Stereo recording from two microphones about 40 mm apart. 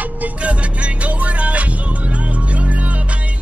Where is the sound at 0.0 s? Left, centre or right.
Right.